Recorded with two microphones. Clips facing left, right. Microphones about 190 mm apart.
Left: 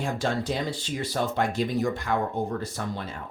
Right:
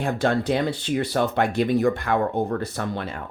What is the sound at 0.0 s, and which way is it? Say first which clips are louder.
Speech: right 5 dB; 60° right (ahead or behind).